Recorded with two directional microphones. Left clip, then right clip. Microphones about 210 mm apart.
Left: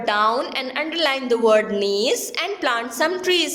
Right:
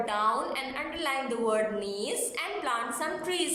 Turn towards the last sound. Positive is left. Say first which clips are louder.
# left 11 dB
turn(degrees=45)  # may be behind; listen again after turning